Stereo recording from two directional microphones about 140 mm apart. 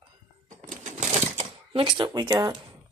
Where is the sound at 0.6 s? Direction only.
60° right (ahead or behind).